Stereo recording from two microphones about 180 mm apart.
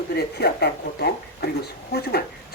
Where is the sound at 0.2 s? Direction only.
65° left (ahead or behind).